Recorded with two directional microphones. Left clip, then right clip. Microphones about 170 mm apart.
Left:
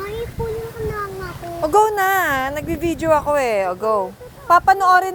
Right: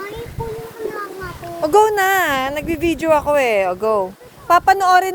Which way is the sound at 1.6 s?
40° right (ahead or behind).